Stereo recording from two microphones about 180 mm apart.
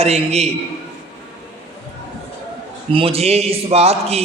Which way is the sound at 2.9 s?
30° right (ahead or behind).